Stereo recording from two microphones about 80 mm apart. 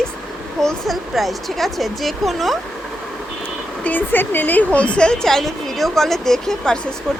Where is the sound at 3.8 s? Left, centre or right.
Left.